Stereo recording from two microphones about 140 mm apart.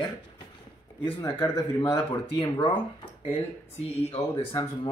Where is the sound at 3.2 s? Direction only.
45° left (ahead or behind).